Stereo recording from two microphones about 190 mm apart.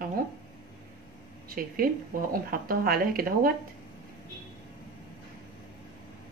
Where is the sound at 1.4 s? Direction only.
50° right (ahead or behind).